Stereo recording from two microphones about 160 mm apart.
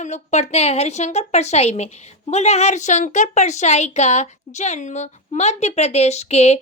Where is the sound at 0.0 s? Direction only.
45° left (ahead or behind).